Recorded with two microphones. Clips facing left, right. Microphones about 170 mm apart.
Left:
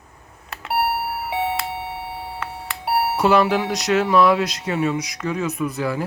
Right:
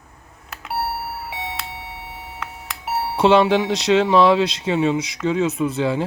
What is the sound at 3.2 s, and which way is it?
Speech, 25° right (ahead or behind).